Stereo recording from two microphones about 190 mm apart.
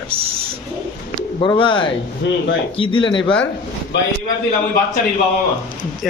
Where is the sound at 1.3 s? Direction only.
25° left (ahead or behind).